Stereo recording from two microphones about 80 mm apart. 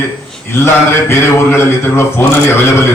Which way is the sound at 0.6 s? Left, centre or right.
Left.